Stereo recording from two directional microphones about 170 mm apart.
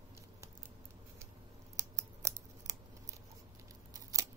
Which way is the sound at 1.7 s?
20° right (ahead or behind).